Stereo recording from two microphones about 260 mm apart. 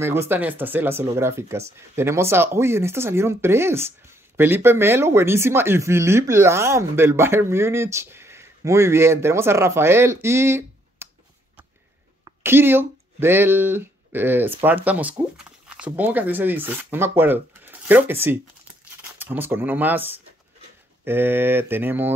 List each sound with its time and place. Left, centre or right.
0.0 s speech: centre
12.3 s speech: centre